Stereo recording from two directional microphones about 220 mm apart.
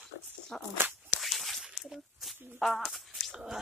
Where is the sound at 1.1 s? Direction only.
Centre (ahead or behind).